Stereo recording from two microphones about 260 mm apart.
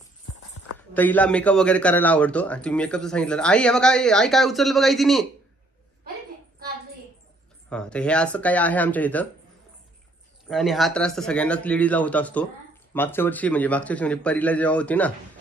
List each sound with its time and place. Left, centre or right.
0.7 s a man's voice: centre
7.7 s a man's voice: centre
10.5 s a man's voice: centre